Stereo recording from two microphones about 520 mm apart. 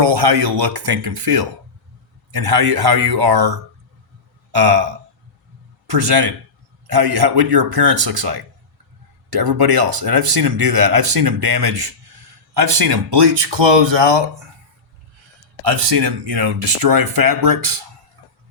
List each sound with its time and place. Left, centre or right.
0.0 s speech: right
5.9 s speech: right
15.6 s speech: right